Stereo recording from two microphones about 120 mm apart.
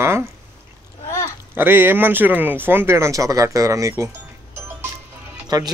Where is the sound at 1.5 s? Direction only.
15° right (ahead or behind).